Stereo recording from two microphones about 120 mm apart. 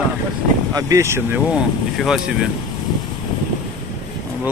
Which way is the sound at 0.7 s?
25° right (ahead or behind).